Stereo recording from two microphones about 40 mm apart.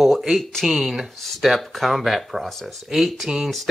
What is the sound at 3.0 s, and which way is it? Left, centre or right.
Speech, centre.